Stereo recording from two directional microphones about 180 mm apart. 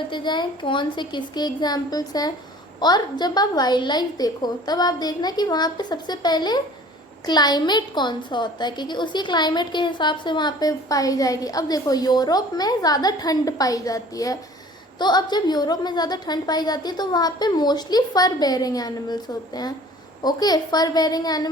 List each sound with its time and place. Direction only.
0.1 s a woman's voice: 25° left (ahead or behind)